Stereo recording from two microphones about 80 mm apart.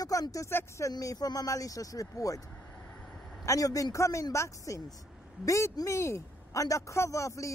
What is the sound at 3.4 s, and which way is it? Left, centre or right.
A man's voice, left.